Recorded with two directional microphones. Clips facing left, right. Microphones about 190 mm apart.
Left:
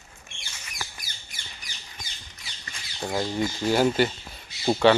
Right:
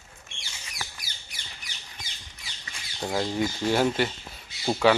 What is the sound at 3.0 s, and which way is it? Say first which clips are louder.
Speech: even; centre (ahead or behind).